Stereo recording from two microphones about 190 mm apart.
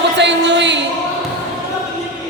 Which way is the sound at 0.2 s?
70° right (ahead or behind).